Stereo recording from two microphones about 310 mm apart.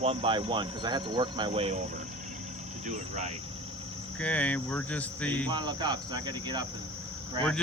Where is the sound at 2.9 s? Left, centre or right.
Right.